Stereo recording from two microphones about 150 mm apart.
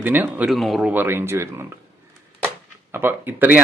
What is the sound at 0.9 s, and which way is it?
Speech, 15° right (ahead or behind).